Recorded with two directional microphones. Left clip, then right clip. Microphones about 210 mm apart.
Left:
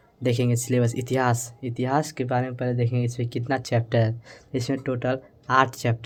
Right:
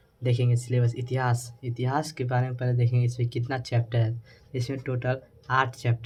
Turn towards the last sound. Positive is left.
turn(degrees=50)  # may be behind; listen again after turning